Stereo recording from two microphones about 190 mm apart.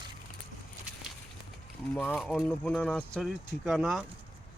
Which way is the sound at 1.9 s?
10° left (ahead or behind).